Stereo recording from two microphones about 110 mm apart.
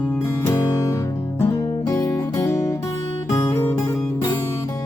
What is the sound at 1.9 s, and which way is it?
Music, 30° left (ahead or behind).